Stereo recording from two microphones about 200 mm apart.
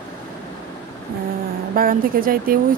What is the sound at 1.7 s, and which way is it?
Speech, 45° right (ahead or behind).